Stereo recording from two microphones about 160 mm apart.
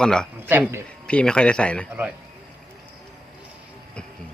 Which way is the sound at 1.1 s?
5° left (ahead or behind).